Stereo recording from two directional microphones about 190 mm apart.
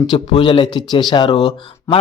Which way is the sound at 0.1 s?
25° left (ahead or behind).